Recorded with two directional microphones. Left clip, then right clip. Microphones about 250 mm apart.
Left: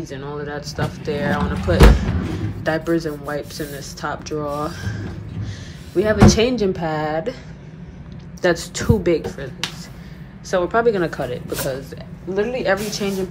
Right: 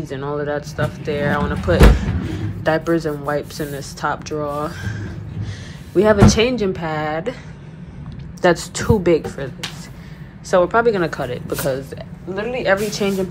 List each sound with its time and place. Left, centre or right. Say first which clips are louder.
0.0 s a woman's voice: right 5 dB; centre
8.4 s a woman's voice: right 3 dB; centre